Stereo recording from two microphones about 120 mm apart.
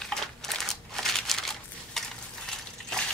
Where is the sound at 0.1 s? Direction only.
5° left (ahead or behind).